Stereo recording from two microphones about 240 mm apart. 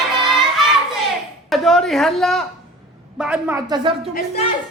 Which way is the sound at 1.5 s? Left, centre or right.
Centre.